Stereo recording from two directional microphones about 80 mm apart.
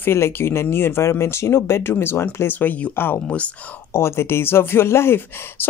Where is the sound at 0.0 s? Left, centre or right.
Left.